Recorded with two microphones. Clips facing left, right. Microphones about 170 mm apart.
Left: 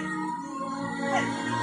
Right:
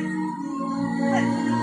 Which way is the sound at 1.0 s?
40° right (ahead or behind).